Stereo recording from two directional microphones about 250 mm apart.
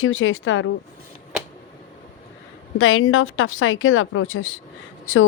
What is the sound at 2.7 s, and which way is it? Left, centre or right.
A woman's voice, left.